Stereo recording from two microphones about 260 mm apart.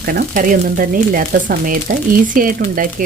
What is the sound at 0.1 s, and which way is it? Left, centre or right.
Speech, right.